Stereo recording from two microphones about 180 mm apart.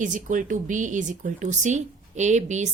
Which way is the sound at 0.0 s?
45° right (ahead or behind).